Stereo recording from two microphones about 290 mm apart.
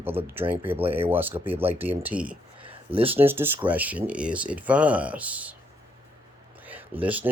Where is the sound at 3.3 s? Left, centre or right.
Centre.